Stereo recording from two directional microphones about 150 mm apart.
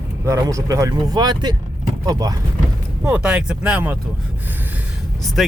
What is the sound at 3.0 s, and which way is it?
Speech, 10° right (ahead or behind).